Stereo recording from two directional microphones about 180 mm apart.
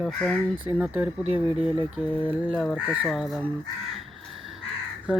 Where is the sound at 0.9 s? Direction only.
10° right (ahead or behind).